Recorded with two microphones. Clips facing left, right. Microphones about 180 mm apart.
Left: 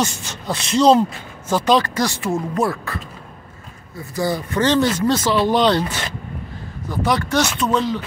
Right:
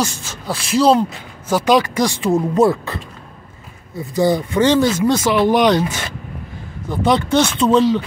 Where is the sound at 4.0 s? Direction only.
20° right (ahead or behind).